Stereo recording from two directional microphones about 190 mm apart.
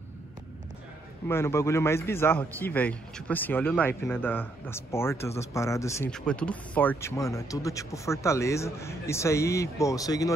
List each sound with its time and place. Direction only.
1.2 s speech: 15° left (ahead or behind)
6.0 s speech: 5° left (ahead or behind)